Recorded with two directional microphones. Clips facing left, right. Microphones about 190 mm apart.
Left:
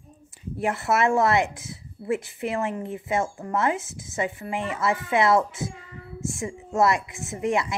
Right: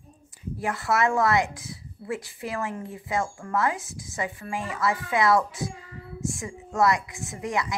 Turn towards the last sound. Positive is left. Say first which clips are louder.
# left 4 dB
turn(degrees=25)  # may be behind; listen again after turning